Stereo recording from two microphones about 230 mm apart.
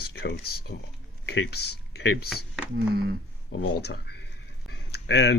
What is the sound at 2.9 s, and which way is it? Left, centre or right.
Speech, right.